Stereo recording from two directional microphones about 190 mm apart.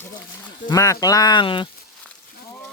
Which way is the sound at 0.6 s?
15° left (ahead or behind).